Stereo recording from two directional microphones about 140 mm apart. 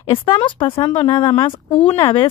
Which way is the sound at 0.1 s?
35° left (ahead or behind).